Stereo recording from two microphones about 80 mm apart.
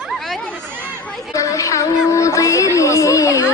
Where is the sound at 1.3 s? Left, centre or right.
Left.